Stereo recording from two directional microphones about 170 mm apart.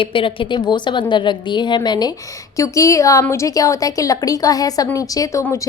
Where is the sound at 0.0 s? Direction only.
30° left (ahead or behind).